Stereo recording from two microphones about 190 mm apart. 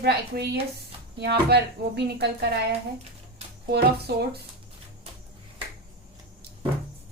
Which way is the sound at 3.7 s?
60° right (ahead or behind).